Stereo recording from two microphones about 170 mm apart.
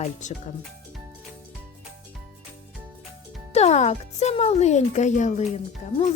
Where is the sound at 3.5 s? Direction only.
40° left (ahead or behind).